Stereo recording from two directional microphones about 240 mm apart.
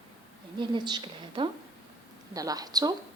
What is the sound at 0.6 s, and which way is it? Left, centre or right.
A woman's voice, centre.